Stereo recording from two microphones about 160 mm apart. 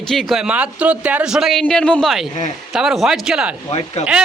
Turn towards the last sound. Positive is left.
turn(degrees=40)  # may be behind; listen again after turning